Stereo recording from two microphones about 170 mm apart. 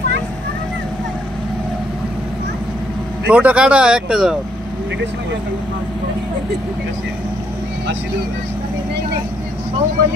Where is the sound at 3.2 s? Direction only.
10° right (ahead or behind).